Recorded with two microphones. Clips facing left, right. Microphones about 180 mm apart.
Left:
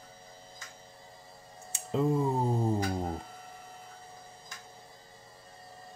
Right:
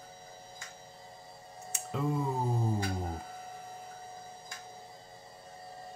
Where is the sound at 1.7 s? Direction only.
30° left (ahead or behind).